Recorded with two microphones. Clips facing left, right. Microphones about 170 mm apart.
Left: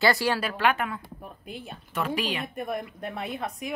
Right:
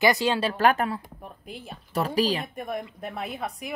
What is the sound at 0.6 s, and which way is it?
Speech, 40° right (ahead or behind).